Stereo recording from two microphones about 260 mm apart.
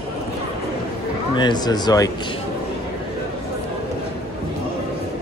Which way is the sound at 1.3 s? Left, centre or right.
Centre.